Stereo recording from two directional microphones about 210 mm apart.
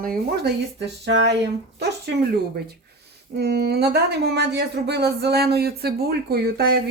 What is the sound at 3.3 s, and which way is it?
Speech, 50° right (ahead or behind).